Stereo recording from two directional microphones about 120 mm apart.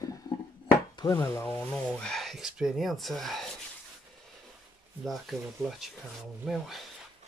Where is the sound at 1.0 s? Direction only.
25° left (ahead or behind); by 3.4 s centre (ahead or behind).